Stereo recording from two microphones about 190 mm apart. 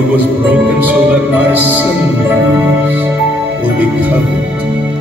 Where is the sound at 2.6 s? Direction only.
10° right (ahead or behind).